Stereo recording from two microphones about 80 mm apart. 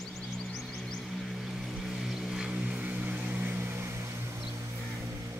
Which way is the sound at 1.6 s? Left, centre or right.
Centre.